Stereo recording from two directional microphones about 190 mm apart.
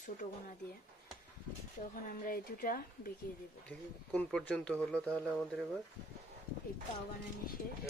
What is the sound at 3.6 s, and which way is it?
Speech, 5° left (ahead or behind).